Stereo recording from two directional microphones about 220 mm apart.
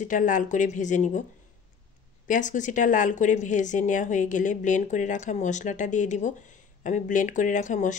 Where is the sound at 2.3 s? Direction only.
35° left (ahead or behind).